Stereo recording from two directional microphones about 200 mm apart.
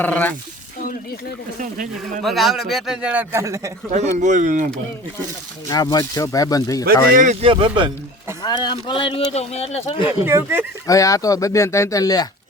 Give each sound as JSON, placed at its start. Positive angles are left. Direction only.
{"t": 0.0, "sound": "speech", "side_deg": 10}
{"t": 1.5, "sound": "speech", "side_deg": -40}
{"t": 2.2, "sound": "a man's voice", "side_deg": 0}
{"t": 3.9, "sound": "speech", "side_deg": -35}
{"t": 5.6, "sound": "speech", "side_deg": 20}
{"t": 7.2, "sound": "speech", "side_deg": -35}
{"t": 7.5, "sound": "speech", "side_deg": -25}
{"t": 8.4, "sound": "speech", "side_deg": 20}
{"t": 10.2, "sound": "speech", "side_deg": -10}
{"t": 10.8, "sound": "speech", "side_deg": 15}